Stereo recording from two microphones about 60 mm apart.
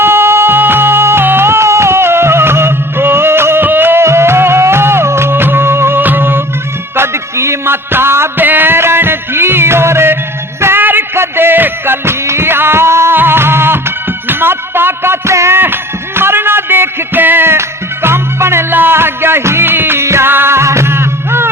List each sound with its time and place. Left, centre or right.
0.0 s music: right
6.0 s music: right
15.5 s music: right